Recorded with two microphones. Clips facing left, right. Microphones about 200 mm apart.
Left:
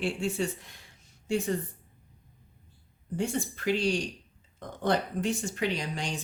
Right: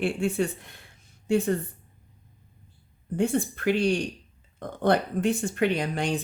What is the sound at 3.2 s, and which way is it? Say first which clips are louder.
Speech: right 6 dB; 55° right (ahead or behind).